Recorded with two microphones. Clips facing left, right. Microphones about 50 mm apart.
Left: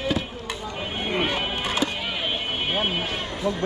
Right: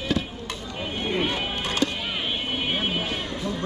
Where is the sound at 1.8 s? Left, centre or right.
Centre.